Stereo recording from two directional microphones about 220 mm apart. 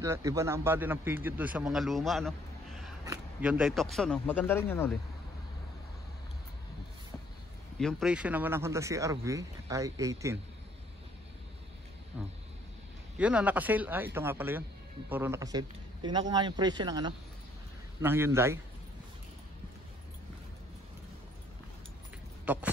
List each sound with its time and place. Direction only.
0.0 s speech: 15° right (ahead or behind); by 4.9 s 10° left (ahead or behind)
7.8 s speech: 5° right (ahead or behind)
12.1 s a man's voice: 5° right (ahead or behind)
22.4 s vehicle: 5° right (ahead or behind)